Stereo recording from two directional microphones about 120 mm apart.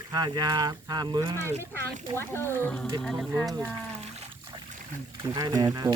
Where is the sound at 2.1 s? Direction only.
20° left (ahead or behind); by 3.4 s centre (ahead or behind).